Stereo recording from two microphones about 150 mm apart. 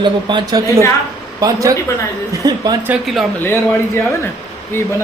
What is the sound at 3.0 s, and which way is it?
Speech, centre (ahead or behind).